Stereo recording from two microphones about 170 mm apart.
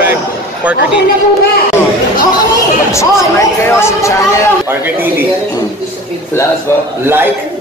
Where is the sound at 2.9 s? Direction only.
15° left (ahead or behind).